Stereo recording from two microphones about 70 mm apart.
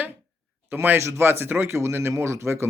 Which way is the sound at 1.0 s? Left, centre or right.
Right.